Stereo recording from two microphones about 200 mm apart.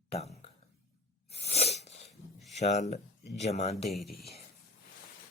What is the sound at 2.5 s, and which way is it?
Speech, 35° left (ahead or behind).